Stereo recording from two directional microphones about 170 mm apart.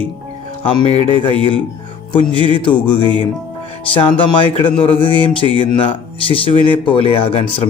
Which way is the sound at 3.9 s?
30° left (ahead or behind).